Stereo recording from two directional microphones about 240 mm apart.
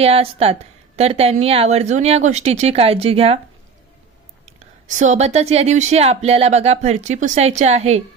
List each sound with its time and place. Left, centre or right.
0.0 s speech: right
4.4 s speech: right